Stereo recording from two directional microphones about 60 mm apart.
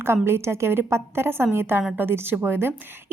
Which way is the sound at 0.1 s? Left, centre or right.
Right.